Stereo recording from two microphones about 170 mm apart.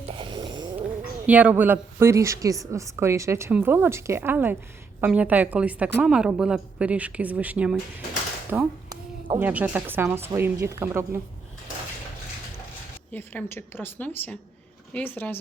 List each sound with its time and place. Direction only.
0.1 s a sound: 30° right (ahead or behind)
1.3 s a woman's voice: 10° right (ahead or behind)
13.1 s a woman's voice: 10° left (ahead or behind)